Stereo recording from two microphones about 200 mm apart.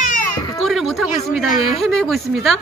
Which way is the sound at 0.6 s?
Centre (ahead or behind).